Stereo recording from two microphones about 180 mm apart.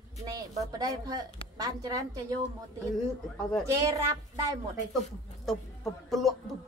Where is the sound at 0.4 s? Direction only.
20° right (ahead or behind).